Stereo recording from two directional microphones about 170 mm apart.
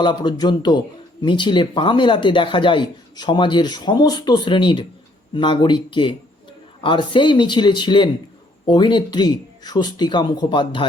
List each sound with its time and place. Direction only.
0.0 s speech: 25° left (ahead or behind)